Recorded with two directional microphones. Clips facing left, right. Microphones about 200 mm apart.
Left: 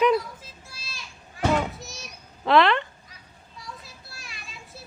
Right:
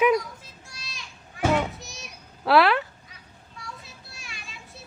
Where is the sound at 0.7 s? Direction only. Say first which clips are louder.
Right 1 dB; centre (ahead or behind).